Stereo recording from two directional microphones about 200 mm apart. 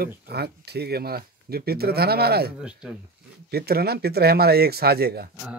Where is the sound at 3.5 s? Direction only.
50° right (ahead or behind).